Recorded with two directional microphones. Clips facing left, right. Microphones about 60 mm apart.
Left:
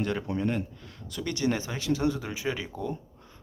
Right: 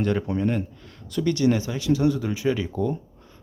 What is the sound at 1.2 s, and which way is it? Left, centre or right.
Speech, left.